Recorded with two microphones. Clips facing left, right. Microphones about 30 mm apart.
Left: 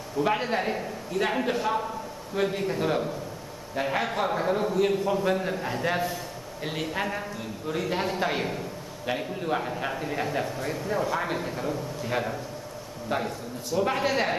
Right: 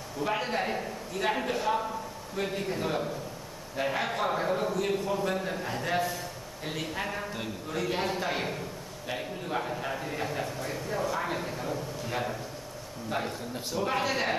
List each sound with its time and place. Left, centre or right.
0.2 s a man's voice: centre
13.7 s a man's voice: centre